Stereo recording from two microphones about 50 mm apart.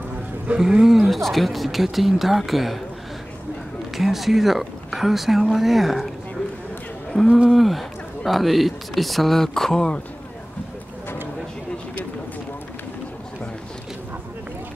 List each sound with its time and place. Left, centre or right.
0.6 s speech: centre
3.9 s speech: centre
7.4 s speech: centre